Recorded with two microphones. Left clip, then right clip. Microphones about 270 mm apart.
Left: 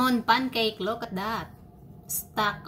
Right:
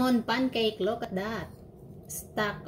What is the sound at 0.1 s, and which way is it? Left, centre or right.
Speech, centre.